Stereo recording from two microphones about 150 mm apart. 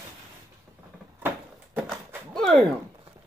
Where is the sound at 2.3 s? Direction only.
5° left (ahead or behind).